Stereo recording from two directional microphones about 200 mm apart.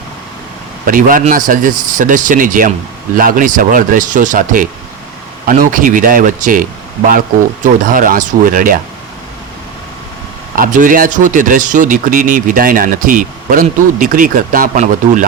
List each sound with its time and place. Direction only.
0.9 s a man's voice: 45° right (ahead or behind)
10.5 s a man's voice: 40° right (ahead or behind)